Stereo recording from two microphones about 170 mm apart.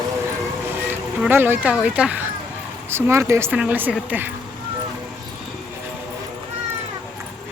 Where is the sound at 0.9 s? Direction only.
10° right (ahead or behind).